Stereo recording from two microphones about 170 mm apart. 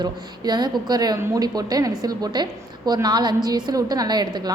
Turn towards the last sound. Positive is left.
turn(degrees=-25)  # may be behind; listen again after turning